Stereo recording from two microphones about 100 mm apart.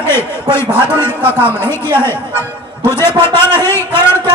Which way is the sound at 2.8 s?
25° left (ahead or behind).